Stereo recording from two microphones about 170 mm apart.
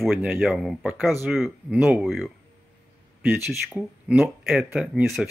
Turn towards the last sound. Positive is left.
turn(degrees=-5)  # may be behind; listen again after turning